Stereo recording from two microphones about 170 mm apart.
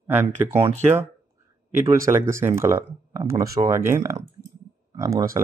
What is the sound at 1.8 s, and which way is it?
Speech, 15° right (ahead or behind).